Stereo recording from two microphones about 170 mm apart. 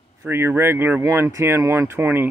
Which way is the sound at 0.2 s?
15° right (ahead or behind).